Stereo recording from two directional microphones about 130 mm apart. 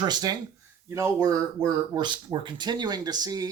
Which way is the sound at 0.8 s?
20° right (ahead or behind).